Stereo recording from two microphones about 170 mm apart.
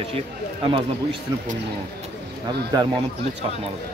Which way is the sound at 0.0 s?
35° right (ahead or behind).